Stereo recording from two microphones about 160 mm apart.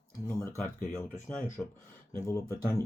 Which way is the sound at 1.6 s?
10° left (ahead or behind).